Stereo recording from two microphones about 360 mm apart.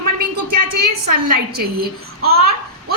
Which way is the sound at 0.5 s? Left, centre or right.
Right.